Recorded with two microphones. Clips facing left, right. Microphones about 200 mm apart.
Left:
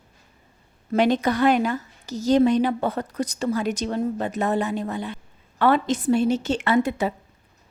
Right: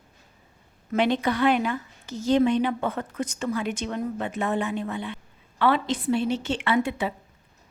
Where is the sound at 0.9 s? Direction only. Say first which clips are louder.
Left 3 dB; 40° left (ahead or behind).